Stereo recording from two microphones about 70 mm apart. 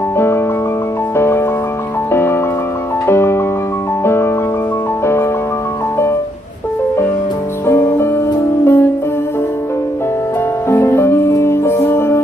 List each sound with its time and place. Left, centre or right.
1.1 s music: left
3.1 s music: left
8.6 s music: left
10.7 s music: left